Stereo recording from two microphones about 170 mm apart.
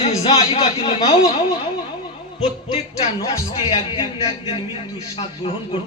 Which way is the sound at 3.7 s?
35° left (ahead or behind).